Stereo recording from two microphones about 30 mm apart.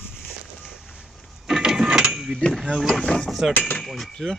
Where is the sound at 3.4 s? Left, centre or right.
Centre.